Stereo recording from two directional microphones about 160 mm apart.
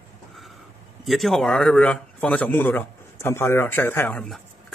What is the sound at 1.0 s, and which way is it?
A man's voice, centre (ahead or behind).